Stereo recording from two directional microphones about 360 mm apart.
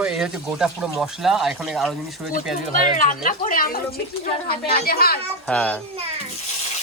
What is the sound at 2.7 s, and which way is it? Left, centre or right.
Speech, left.